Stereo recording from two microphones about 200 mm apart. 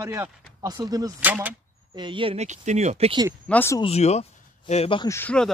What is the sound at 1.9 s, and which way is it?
Speech, 25° right (ahead or behind).